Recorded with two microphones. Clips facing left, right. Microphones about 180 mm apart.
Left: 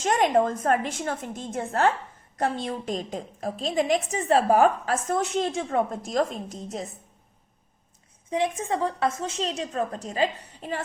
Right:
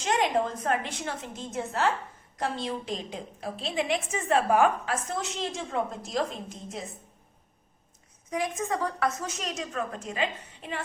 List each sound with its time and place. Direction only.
0.0 s a woman's voice: 45° left (ahead or behind)
8.3 s a woman's voice: 30° left (ahead or behind)